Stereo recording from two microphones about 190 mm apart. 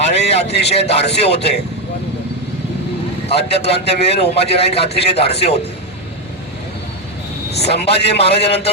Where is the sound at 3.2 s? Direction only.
30° left (ahead or behind).